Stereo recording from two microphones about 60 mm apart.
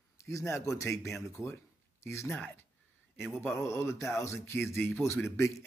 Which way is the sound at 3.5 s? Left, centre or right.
Left.